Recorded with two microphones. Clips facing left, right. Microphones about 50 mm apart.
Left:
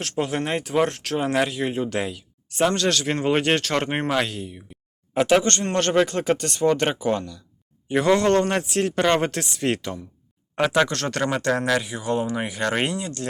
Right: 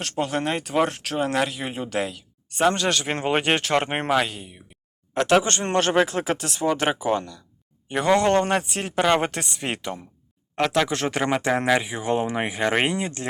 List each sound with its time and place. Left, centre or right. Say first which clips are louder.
0.0 s speech: even; centre
5.1 s speech: left 1 dB; centre
5.4 s speech: even; centre
10.5 s speech: left 2 dB; centre
10.8 s speech: right 1 dB; centre